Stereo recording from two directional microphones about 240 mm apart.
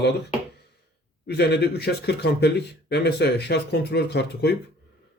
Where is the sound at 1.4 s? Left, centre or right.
Left.